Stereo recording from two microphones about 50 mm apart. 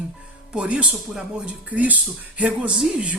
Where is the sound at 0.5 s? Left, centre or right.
Right.